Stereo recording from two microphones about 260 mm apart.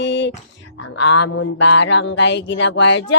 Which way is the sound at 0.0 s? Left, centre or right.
Left.